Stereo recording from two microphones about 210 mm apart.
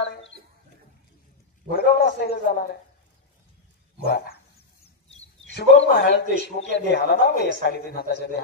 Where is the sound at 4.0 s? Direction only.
45° left (ahead or behind).